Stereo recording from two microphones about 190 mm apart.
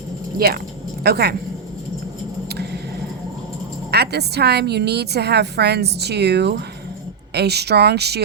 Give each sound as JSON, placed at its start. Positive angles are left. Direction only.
{"t": 0.3, "sound": "a woman's voice", "side_deg": -55}
{"t": 3.9, "sound": "a woman's voice", "side_deg": -60}